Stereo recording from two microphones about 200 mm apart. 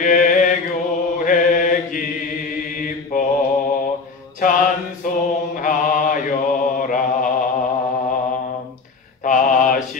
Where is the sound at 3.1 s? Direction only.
45° left (ahead or behind).